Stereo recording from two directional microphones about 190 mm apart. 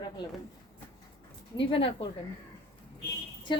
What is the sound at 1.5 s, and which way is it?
Speech, 25° left (ahead or behind).